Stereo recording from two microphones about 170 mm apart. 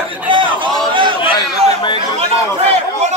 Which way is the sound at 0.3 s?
30° right (ahead or behind).